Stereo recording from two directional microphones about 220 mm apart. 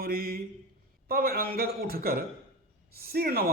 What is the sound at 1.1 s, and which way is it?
A man's voice, 45° right (ahead or behind).